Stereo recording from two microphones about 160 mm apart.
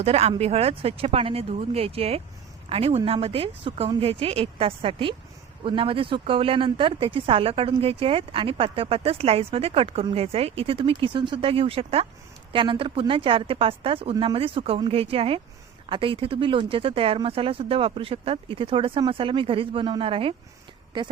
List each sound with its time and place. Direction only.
0.0 s speech: 40° right (ahead or behind)